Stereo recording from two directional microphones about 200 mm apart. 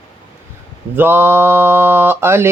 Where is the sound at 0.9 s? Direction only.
10° right (ahead or behind).